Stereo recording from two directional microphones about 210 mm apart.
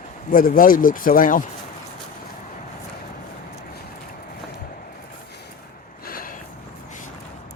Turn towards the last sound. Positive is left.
turn(degrees=45)  # may be behind; listen again after turning